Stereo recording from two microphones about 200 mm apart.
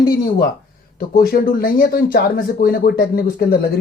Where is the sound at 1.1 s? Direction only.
50° left (ahead or behind).